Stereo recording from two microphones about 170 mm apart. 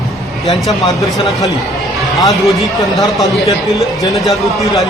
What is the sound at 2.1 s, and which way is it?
A man's voice, centre (ahead or behind).